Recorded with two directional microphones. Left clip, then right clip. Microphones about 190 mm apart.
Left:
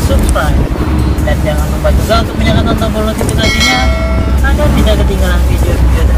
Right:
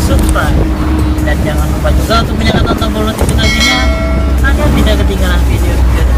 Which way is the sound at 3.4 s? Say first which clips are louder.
Even; centre (ahead or behind).